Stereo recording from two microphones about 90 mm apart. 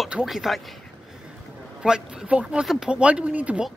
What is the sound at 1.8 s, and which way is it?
Speech, 10° right (ahead or behind).